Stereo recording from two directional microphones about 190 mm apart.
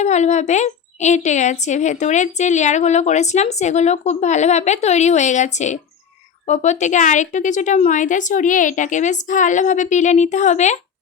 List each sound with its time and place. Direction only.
0.0 s a woman's voice: 35° left (ahead or behind)